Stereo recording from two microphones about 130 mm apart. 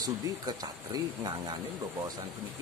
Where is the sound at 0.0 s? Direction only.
30° right (ahead or behind).